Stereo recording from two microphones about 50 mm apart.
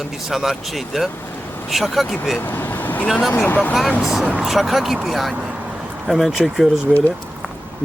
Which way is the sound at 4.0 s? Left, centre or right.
Centre.